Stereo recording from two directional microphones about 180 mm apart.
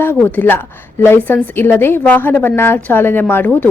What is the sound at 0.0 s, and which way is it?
A woman's voice, 10° left (ahead or behind).